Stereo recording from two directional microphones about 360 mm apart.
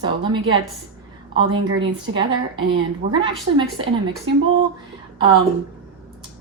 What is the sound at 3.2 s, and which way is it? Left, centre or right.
Speech, centre.